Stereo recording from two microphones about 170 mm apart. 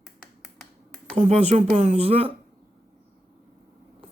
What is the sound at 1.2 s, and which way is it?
Speech, 40° right (ahead or behind).